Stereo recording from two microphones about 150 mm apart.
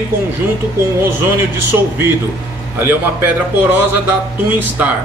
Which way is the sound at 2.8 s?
15° right (ahead or behind).